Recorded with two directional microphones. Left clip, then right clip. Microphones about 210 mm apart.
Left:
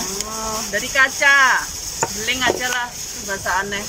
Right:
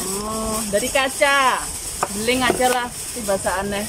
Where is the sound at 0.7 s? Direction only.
15° right (ahead or behind).